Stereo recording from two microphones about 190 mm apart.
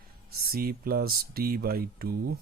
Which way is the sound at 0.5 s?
50° right (ahead or behind).